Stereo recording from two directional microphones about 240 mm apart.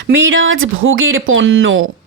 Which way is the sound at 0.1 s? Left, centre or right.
Right.